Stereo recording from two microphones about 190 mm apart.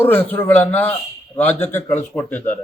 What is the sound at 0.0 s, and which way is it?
A man's voice, 10° left (ahead or behind).